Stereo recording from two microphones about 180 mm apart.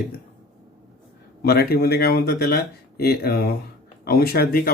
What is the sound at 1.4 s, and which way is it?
Speech, 60° left (ahead or behind).